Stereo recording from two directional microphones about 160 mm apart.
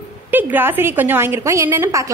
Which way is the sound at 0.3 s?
10° right (ahead or behind).